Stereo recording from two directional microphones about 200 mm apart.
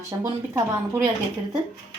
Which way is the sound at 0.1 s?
20° right (ahead or behind).